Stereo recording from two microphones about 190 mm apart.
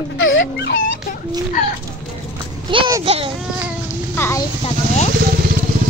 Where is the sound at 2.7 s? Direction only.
20° right (ahead or behind).